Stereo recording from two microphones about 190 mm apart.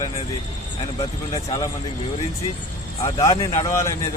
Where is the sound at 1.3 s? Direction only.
20° left (ahead or behind).